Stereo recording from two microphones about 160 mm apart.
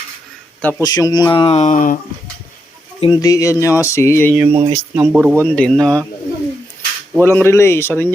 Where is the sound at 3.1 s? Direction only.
20° left (ahead or behind).